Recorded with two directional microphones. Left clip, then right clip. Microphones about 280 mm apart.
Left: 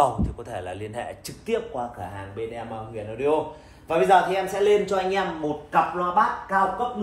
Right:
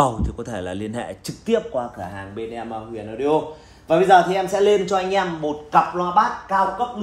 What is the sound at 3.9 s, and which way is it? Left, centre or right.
Speech, right.